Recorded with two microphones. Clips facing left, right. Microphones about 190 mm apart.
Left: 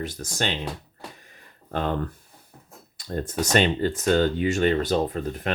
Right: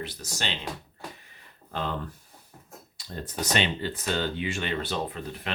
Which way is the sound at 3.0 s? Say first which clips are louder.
Left 7 dB; 50° left (ahead or behind).